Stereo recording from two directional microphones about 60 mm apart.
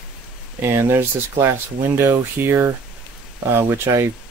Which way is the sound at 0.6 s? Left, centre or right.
Right.